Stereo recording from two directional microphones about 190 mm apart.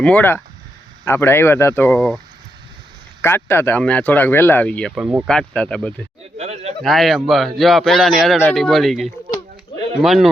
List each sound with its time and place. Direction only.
0.0 s speech: 10° left (ahead or behind)
3.2 s speech: 10° left (ahead or behind)
6.3 s speech: 35° right (ahead or behind)
6.8 s a man's voice: centre (ahead or behind)